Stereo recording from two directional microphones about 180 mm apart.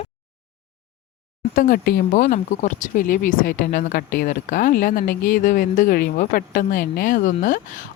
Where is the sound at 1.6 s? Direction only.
55° left (ahead or behind).